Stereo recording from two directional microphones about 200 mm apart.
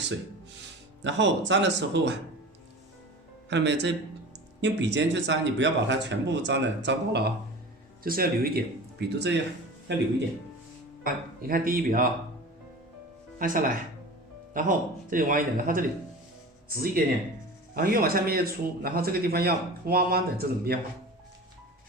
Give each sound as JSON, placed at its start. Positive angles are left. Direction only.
{"t": 1.0, "sound": "speech", "side_deg": -65}
{"t": 3.5, "sound": "a man's voice", "side_deg": -60}
{"t": 11.0, "sound": "speech", "side_deg": -45}
{"t": 13.4, "sound": "a man's voice", "side_deg": -40}